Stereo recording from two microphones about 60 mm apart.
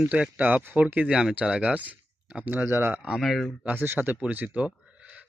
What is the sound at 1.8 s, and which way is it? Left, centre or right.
Speech, right.